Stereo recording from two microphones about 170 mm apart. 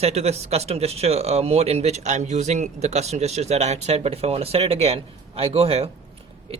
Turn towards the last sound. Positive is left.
turn(degrees=-35)  # may be behind; listen again after turning